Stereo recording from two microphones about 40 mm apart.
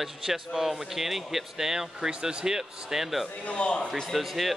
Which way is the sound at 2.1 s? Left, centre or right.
Right.